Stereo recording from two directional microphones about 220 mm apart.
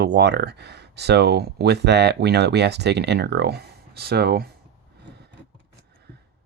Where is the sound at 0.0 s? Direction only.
50° right (ahead or behind).